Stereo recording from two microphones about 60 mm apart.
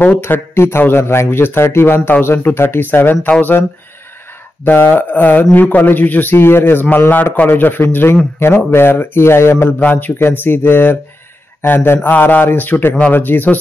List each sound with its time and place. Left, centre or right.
0.0 s a man's voice: left
2.0 s a man's voice: left
4.6 s a man's voice: left
9.8 s a man's voice: left